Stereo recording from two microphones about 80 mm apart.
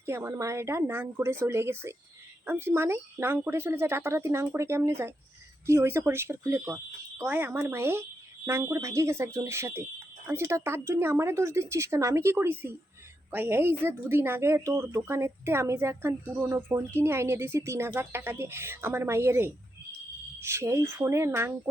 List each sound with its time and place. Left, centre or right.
0.0 s a woman's voice: right